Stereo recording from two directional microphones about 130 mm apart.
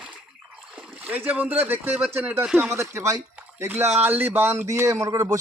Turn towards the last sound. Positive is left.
turn(degrees=-25)  # may be behind; listen again after turning